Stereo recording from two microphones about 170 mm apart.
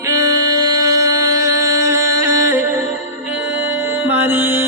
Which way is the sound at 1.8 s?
15° right (ahead or behind).